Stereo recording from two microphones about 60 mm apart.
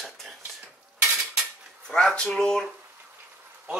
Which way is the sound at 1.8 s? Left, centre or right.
Centre.